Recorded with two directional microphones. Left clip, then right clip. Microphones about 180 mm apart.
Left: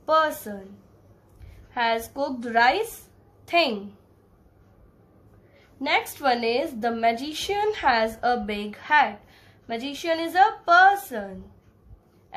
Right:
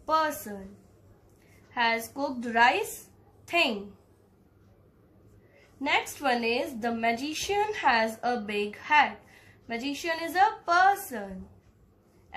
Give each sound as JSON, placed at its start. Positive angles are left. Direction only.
{"t": 0.0, "sound": "a woman's voice", "side_deg": 50}
{"t": 1.7, "sound": "a woman's voice", "side_deg": 45}
{"t": 5.9, "sound": "a woman's voice", "side_deg": 50}